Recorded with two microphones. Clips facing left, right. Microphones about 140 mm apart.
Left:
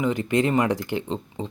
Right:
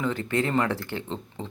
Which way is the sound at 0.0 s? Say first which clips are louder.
Left 4 dB; 15° left (ahead or behind).